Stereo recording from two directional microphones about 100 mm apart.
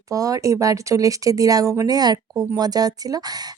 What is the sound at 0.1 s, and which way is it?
Speech, 35° right (ahead or behind).